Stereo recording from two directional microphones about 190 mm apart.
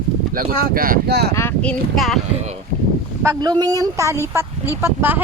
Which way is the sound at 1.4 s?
10° left (ahead or behind).